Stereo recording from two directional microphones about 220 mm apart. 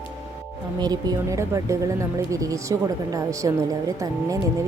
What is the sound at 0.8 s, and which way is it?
Speech, 15° right (ahead or behind).